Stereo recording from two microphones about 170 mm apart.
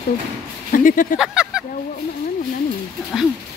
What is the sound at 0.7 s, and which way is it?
Speech, 50° left (ahead or behind).